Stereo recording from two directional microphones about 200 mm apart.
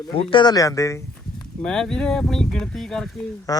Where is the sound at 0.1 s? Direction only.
25° left (ahead or behind).